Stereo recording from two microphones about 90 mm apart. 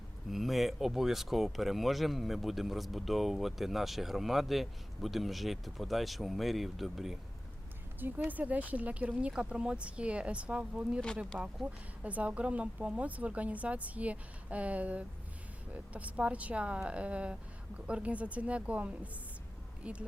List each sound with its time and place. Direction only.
0.3 s speech: centre (ahead or behind)
8.3 s a woman's voice: 15° right (ahead or behind)